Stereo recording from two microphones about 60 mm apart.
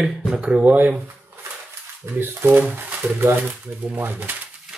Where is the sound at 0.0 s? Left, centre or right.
Centre.